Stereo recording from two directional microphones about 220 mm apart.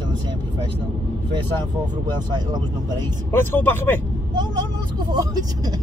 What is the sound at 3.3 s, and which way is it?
Speech, 10° left (ahead or behind).